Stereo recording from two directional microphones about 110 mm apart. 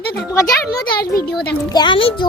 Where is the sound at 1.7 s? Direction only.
45° left (ahead or behind).